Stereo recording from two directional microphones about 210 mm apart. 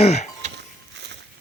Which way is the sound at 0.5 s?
55° right (ahead or behind).